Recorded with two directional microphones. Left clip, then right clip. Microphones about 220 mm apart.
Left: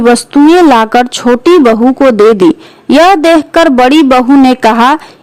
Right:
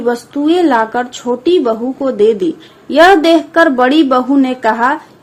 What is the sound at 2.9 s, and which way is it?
Speech, 50° left (ahead or behind).